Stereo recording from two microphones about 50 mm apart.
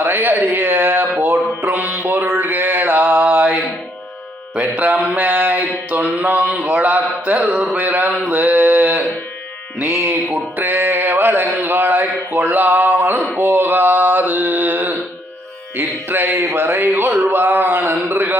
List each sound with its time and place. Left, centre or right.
0.0 s speech: right
1.2 s mantra: right
5.1 s mantra: right
6.7 s a sound: right
7.8 s mantra: right
8.3 s a sound: right
13.4 s mantra: right
16.0 s speech: right